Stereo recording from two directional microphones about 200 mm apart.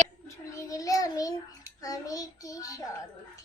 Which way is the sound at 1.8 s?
20° left (ahead or behind).